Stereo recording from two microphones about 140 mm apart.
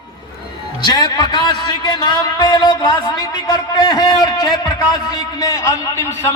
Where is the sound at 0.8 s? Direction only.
25° left (ahead or behind).